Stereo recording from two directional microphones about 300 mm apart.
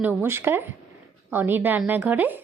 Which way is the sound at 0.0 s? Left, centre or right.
Centre.